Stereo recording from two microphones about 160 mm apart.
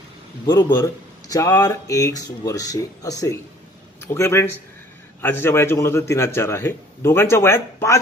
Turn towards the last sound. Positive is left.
turn(degrees=15)  # may be behind; listen again after turning